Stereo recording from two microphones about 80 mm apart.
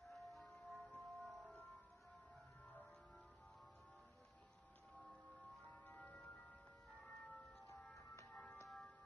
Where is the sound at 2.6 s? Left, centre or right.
Centre.